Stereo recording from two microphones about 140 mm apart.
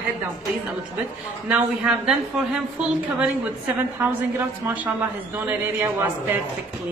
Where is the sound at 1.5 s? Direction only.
5° right (ahead or behind).